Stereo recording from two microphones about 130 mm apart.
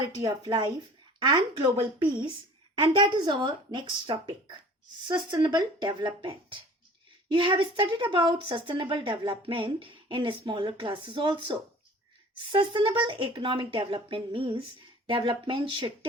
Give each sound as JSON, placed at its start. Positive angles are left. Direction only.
{"t": 0.2, "sound": "a woman's voice", "side_deg": -35}